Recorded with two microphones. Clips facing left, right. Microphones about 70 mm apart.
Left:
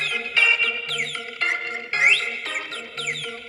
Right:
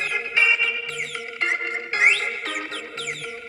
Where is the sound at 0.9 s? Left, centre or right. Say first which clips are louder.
Left 2 dB; left.